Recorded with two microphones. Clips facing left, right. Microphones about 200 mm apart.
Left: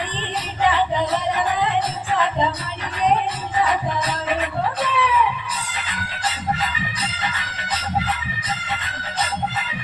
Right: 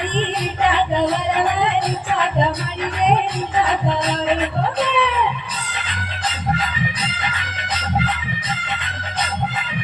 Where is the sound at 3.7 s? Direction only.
20° right (ahead or behind).